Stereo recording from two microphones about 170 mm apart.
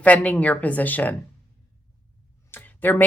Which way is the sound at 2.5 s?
10° left (ahead or behind).